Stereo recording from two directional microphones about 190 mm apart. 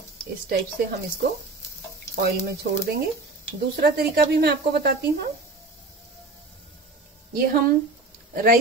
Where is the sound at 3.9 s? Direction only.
55° right (ahead or behind).